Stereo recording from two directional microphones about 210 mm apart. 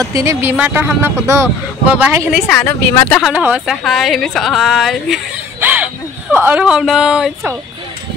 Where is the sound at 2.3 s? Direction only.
5° left (ahead or behind).